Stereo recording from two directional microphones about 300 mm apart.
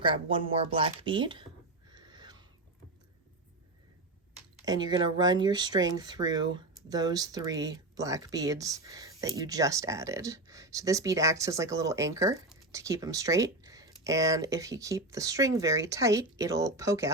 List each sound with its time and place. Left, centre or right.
0.0 s speech: centre
1.9 s owl: centre
4.6 s speech: centre